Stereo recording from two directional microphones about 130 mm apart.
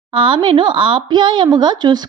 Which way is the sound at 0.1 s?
40° right (ahead or behind).